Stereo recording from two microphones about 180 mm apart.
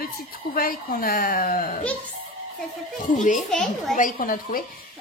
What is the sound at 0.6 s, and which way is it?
A woman's voice, 55° left (ahead or behind).